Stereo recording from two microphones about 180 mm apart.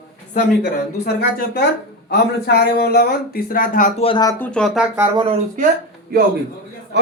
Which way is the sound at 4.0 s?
25° left (ahead or behind).